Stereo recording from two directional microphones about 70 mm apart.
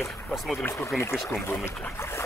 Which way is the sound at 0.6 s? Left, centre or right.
Left.